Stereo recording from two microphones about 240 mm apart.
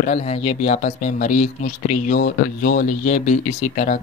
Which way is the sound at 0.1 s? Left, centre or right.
Left.